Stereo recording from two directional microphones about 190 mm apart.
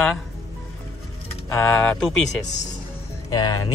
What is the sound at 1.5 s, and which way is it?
Speech, 10° left (ahead or behind).